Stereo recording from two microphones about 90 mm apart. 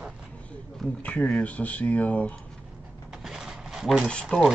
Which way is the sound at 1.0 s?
15° left (ahead or behind).